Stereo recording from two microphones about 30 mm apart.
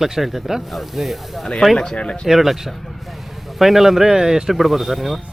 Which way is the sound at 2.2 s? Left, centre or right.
Centre.